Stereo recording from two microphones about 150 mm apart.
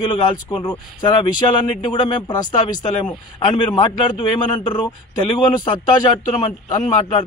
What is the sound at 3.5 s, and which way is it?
A man's voice, 30° left (ahead or behind).